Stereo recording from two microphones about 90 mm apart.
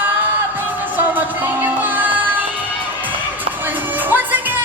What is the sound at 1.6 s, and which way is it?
Music, 20° right (ahead or behind).